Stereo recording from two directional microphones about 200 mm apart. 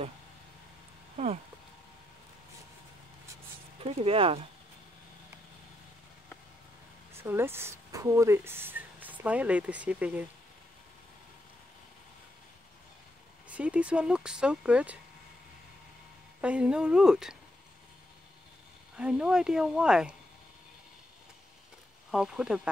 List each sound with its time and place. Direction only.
1.1 s speech: 35° right (ahead or behind)
3.8 s speech: 30° right (ahead or behind)
7.2 s speech: 10° right (ahead or behind)
13.5 s speech: 5° right (ahead or behind)
16.3 s speech: 5° right (ahead or behind)
18.9 s speech: 5° right (ahead or behind)
22.1 s speech: 5° right (ahead or behind)